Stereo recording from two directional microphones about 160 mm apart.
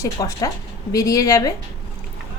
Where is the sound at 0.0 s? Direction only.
20° left (ahead or behind).